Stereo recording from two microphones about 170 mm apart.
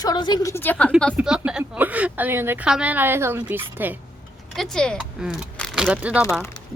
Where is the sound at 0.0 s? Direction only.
25° left (ahead or behind).